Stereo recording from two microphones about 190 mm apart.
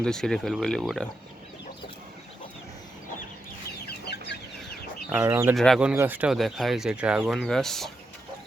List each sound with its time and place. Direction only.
0.0 s speech: 5° left (ahead or behind)
3.8 s chicken: 60° left (ahead or behind)
5.0 s speech: 10° right (ahead or behind)
5.5 s speech: centre (ahead or behind)